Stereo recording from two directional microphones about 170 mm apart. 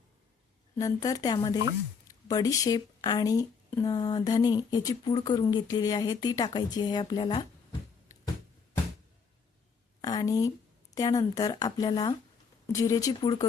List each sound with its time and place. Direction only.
0.8 s speech: 20° left (ahead or behind)
10.0 s a sound: 20° left (ahead or behind)
10.9 s speech: 20° left (ahead or behind)